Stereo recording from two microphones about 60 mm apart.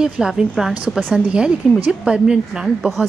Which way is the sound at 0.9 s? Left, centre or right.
Centre.